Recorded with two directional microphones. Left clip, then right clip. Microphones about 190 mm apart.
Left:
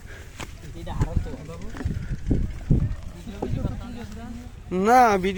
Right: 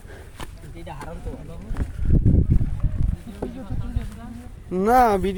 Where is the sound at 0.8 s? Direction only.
Centre (ahead or behind).